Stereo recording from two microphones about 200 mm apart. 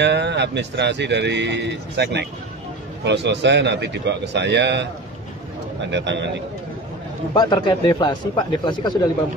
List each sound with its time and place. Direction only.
0.0 s speech: 60° right (ahead or behind)
5.9 s speech: 60° right (ahead or behind)
7.3 s speech: 20° left (ahead or behind)